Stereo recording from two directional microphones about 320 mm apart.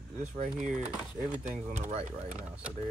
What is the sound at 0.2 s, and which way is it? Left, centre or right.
Speech, right.